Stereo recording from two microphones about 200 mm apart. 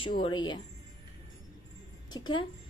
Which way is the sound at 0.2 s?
20° left (ahead or behind).